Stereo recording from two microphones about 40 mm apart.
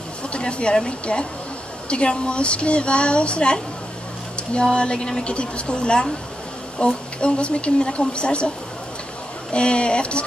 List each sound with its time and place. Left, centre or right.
0.3 s speech: left
9.5 s speech: left